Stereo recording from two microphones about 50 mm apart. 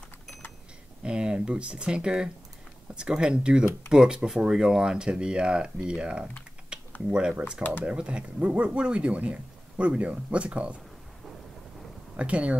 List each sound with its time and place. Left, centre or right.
1.0 s speech: centre
6.7 s typing: right
7.1 s speech: centre
12.2 s speech: right